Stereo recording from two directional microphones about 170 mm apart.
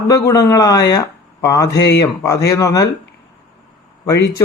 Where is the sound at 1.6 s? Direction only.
90° left.